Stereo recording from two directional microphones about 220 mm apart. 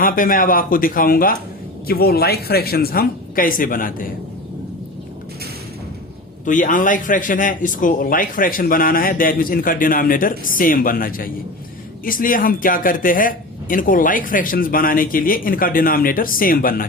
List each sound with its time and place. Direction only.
0.0 s a man's voice: 40° left (ahead or behind)
6.4 s a man's voice: 35° left (ahead or behind)